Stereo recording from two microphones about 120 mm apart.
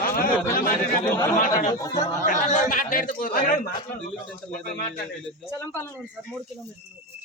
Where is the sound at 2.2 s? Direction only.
85° left.